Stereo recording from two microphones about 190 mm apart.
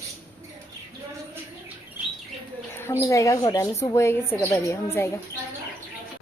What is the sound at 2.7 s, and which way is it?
A woman's voice, 10° left (ahead or behind).